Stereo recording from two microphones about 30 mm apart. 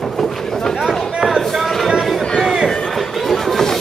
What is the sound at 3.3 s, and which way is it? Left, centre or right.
Music, centre.